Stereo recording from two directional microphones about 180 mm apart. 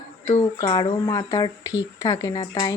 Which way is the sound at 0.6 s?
25° left (ahead or behind).